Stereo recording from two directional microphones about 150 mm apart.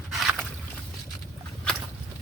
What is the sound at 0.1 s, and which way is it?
Boat, centre (ahead or behind).